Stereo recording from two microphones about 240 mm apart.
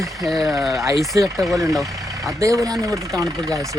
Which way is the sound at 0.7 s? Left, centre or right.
Centre.